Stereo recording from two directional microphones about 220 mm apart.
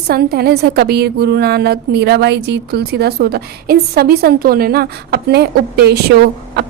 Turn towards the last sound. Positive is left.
turn(degrees=-50)  # may be behind; listen again after turning